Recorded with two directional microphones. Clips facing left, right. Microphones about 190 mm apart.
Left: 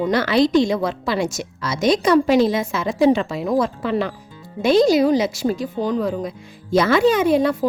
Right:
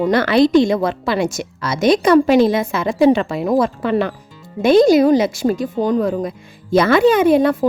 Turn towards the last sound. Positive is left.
turn(degrees=-55)  # may be behind; listen again after turning